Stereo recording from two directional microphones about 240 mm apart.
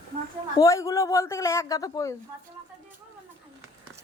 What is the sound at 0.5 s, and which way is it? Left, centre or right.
Speech, centre.